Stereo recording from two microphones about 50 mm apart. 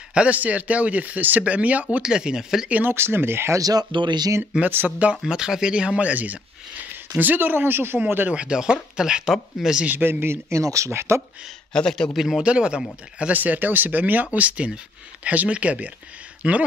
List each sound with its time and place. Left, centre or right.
0.1 s a man's voice: right
2.0 s speech: centre
2.9 s speech: right
4.6 s speech: right
5.2 s speech: centre; by 8.0 s right
8.0 s speech: right
8.4 s speech: centre
9.8 s speech: right
10.5 s speech: right
11.7 s a man's voice: centre
12.2 s speech: centre
12.4 s speech: centre
13.3 s speech: right